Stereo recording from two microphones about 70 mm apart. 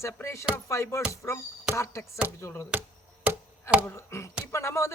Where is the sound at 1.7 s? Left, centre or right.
Left.